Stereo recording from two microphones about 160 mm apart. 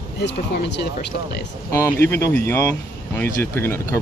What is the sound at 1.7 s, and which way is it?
Speech, 15° left (ahead or behind).